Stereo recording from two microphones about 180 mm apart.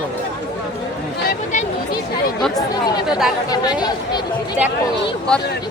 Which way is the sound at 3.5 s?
20° left (ahead or behind).